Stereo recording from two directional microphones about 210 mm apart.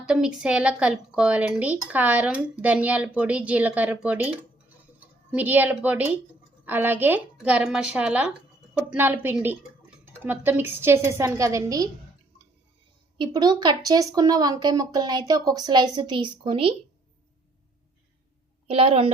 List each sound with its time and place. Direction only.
0.0 s speech: 5° right (ahead or behind)
13.1 s speech: 20° right (ahead or behind)
18.7 s speech: 25° right (ahead or behind)